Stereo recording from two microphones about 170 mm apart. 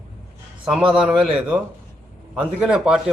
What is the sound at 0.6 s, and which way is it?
Speech, 5° right (ahead or behind).